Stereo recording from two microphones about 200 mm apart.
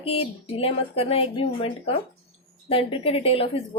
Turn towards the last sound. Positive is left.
turn(degrees=30)  # may be behind; listen again after turning